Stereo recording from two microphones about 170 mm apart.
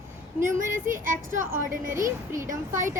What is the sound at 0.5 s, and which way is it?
Speech, 50° right (ahead or behind).